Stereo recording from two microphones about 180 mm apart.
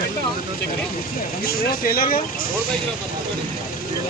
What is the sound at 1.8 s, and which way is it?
Speech, 50° left (ahead or behind).